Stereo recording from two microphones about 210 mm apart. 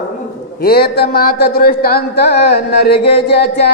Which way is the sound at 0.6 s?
50° left (ahead or behind).